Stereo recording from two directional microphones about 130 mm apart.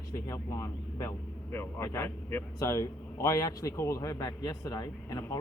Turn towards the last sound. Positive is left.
turn(degrees=30)  # may be behind; listen again after turning